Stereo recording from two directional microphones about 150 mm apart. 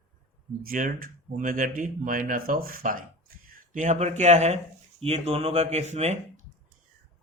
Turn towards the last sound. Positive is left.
turn(degrees=-50)  # may be behind; listen again after turning